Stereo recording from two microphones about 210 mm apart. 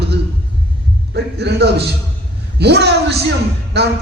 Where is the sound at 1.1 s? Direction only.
50° right (ahead or behind).